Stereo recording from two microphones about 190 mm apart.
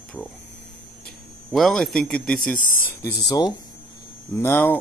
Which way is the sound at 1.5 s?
Centre (ahead or behind).